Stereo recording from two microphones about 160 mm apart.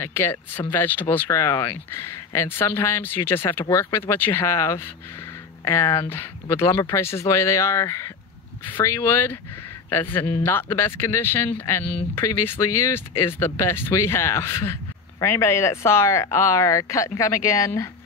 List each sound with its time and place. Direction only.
0.0 s a man's voice: 15° left (ahead or behind)